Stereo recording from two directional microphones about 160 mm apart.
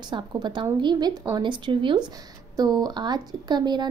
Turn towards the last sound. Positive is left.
turn(degrees=-25)  # may be behind; listen again after turning